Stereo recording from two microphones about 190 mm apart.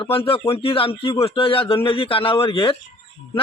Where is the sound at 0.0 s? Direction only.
30° left (ahead or behind).